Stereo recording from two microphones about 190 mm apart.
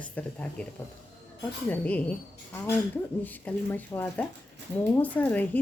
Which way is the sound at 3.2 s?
10° left (ahead or behind).